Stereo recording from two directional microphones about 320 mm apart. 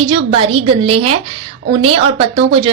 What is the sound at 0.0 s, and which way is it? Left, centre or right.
A woman's voice, centre.